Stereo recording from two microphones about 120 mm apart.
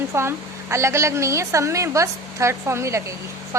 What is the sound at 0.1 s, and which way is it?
A woman's voice, 20° right (ahead or behind).